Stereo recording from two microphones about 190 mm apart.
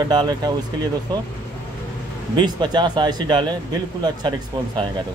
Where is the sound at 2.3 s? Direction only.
20° right (ahead or behind).